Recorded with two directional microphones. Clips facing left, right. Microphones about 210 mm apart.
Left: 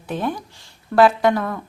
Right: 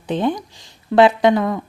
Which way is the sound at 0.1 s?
20° right (ahead or behind).